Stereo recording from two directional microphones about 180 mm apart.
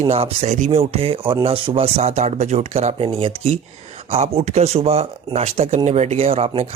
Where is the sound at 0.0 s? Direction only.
35° right (ahead or behind).